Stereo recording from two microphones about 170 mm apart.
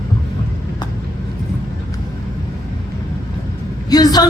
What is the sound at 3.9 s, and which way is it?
Vehicle, 25° left (ahead or behind).